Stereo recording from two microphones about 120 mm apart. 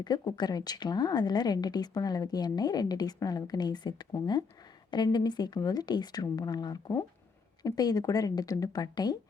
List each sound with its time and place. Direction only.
0.0 s a woman's voice: 35° left (ahead or behind)